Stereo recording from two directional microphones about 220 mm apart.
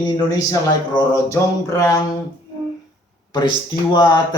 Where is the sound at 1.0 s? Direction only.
15° left (ahead or behind).